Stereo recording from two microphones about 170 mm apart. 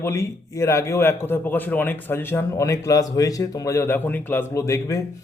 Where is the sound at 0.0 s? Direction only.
15° left (ahead or behind).